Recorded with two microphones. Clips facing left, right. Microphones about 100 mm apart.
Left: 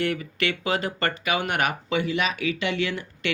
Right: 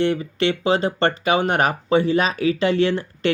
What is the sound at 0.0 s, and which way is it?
Speech, 25° right (ahead or behind).